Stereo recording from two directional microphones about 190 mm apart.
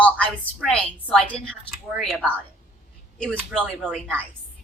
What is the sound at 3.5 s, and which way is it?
Speech, 5° right (ahead or behind).